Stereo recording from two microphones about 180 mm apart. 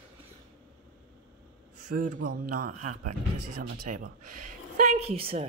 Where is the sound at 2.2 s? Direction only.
45° right (ahead or behind).